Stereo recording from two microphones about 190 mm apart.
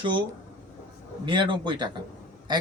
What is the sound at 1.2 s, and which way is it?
Speech, 25° right (ahead or behind).